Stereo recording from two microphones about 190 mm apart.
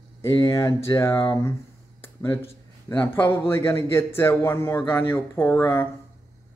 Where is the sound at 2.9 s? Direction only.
10° left (ahead or behind).